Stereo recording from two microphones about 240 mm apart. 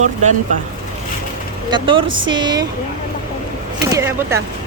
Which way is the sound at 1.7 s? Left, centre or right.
Right.